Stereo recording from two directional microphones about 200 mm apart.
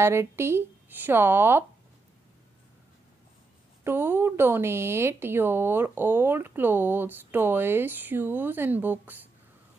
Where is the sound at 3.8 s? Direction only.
10° right (ahead or behind).